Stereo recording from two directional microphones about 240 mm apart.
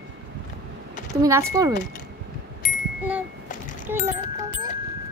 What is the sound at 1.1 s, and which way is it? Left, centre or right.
Speech, centre.